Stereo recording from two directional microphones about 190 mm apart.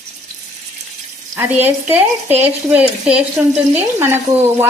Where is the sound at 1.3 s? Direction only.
10° right (ahead or behind).